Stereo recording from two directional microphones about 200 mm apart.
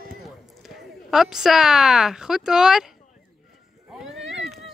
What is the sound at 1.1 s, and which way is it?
Speech, centre (ahead or behind).